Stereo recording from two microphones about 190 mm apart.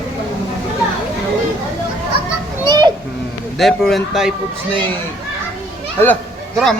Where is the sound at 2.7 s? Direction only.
20° right (ahead or behind).